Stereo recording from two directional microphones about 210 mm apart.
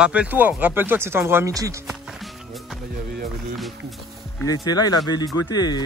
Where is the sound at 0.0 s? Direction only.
5° right (ahead or behind).